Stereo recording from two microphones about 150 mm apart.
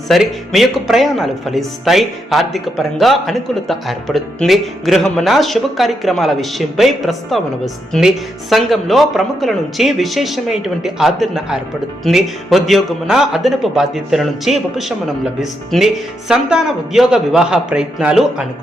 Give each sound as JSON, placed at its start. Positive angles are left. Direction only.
{"t": 0.1, "sound": "speech", "side_deg": 0}